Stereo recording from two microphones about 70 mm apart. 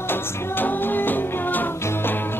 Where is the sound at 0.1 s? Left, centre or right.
Left.